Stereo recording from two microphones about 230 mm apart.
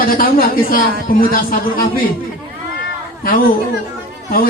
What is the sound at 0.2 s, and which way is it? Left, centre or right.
Speech, left.